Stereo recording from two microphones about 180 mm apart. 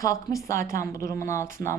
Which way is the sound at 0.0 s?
20° left (ahead or behind).